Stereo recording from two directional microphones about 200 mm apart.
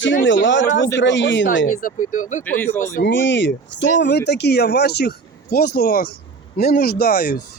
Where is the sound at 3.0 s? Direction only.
60° left (ahead or behind).